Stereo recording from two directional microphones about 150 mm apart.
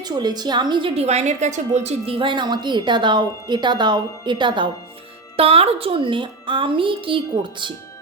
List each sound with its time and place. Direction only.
0.0 s a woman's voice: 25° right (ahead or behind)